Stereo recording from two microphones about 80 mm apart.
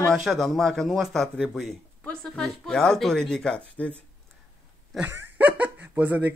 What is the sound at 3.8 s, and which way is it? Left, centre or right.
Speech, centre.